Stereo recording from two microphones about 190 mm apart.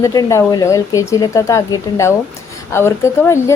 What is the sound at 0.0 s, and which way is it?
A woman's voice, 15° left (ahead or behind).